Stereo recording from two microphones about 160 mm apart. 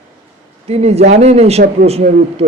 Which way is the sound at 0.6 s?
40° right (ahead or behind).